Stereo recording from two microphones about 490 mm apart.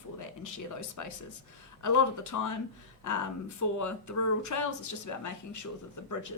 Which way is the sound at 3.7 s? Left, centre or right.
Left.